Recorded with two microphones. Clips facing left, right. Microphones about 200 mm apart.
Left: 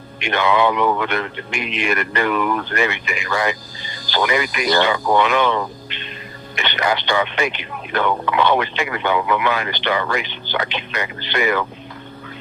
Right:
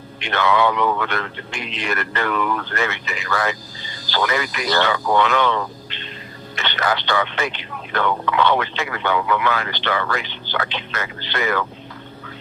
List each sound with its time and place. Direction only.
0.2 s speech: 15° left (ahead or behind)